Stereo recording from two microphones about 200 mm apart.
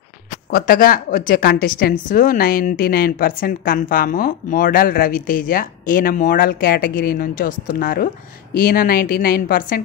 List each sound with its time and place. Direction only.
0.5 s a woman's voice: 50° left (ahead or behind)